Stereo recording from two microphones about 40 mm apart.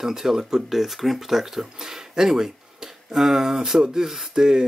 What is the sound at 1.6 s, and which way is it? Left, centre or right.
Music, centre.